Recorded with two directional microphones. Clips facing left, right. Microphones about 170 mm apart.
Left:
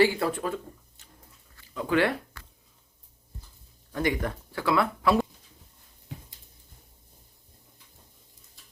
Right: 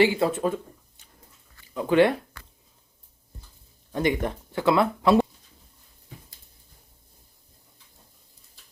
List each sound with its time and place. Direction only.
0.0 s speech: 20° right (ahead or behind)
3.9 s speech: 20° right (ahead or behind)